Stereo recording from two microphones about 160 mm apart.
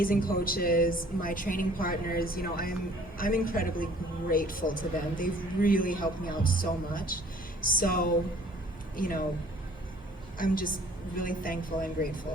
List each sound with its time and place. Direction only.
0.0 s speech: 65° left (ahead or behind)
10.3 s a woman's voice: 60° left (ahead or behind)